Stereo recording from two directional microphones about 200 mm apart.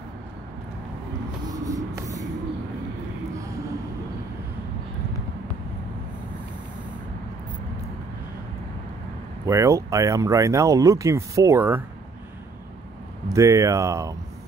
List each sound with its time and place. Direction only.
1.5 s a sound: 15° right (ahead or behind)
9.5 s speech: 15° right (ahead or behind)
13.3 s speech: 15° right (ahead or behind)